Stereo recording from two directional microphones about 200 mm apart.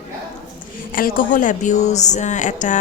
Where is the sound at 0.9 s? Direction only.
45° left (ahead or behind).